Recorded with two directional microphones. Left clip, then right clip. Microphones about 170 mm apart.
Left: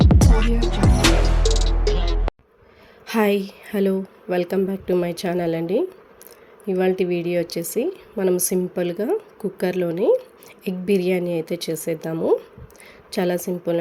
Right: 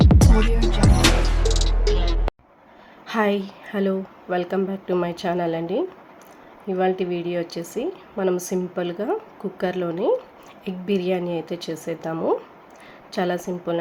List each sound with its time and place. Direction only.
0.0 s music: centre (ahead or behind)
3.1 s a woman's voice: 45° left (ahead or behind)